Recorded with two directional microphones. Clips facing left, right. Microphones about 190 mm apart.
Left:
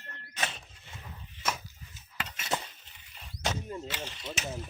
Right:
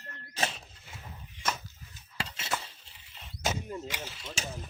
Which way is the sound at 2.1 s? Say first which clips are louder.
Left 1 dB; 30° right (ahead or behind).